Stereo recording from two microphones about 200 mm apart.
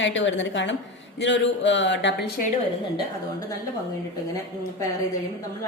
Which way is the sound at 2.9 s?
15° left (ahead or behind).